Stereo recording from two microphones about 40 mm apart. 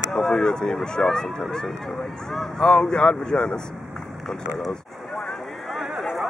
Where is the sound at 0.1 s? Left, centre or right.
Centre.